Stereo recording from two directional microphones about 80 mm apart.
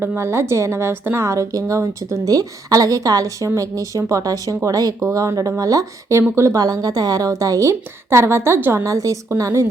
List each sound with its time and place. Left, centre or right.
0.2 s a woman's voice: right
8.8 s a woman's voice: right